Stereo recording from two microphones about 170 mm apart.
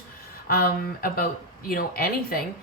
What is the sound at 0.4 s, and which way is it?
Speech, 60° left (ahead or behind).